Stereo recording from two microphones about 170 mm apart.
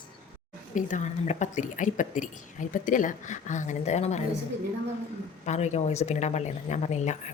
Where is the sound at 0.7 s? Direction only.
45° left (ahead or behind).